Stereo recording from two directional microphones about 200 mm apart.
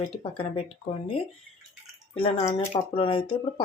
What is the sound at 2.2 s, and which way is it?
Speech, 30° left (ahead or behind).